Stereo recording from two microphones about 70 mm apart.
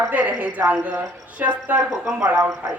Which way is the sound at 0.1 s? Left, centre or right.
Centre.